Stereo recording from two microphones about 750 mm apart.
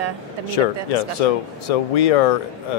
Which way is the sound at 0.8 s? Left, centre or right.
Left.